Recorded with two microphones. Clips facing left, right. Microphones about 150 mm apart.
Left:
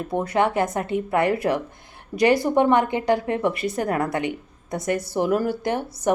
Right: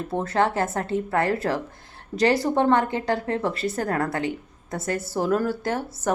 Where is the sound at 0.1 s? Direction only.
15° left (ahead or behind).